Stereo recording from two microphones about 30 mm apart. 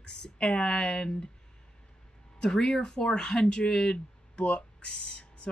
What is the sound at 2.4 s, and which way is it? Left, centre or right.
Speech, left.